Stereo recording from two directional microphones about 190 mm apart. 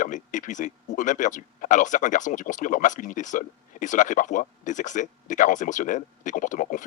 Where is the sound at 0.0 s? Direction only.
40° left (ahead or behind).